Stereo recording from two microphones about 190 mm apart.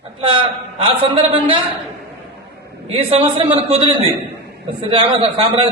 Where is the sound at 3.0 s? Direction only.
30° right (ahead or behind).